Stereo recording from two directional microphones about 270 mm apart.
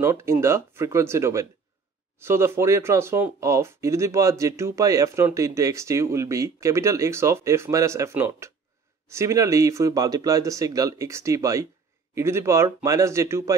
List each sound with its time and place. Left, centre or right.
0.0 s speech: centre